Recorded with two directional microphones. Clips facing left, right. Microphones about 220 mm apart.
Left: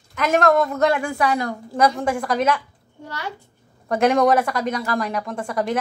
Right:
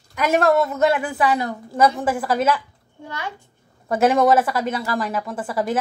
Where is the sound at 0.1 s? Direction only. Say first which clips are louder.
Even; 10° right (ahead or behind).